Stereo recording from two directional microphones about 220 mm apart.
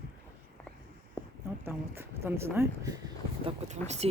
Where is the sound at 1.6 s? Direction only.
10° right (ahead or behind).